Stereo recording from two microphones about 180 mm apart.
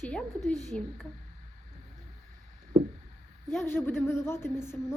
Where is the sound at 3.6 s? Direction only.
10° left (ahead or behind).